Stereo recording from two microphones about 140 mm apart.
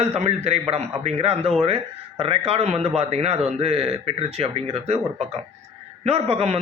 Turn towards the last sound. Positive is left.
turn(degrees=-45)  # may be behind; listen again after turning